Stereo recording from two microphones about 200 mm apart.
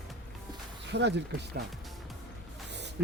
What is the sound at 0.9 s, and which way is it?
Speech, 60° right (ahead or behind).